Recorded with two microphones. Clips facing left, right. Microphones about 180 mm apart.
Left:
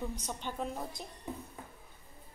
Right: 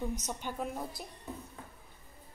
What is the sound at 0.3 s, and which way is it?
Speech, 10° right (ahead or behind).